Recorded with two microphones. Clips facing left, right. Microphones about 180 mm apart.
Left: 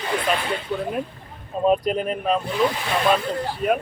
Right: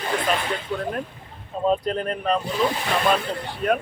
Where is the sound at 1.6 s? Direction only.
15° left (ahead or behind).